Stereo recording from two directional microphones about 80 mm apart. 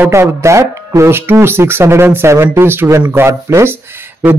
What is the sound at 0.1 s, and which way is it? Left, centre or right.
Speech, right.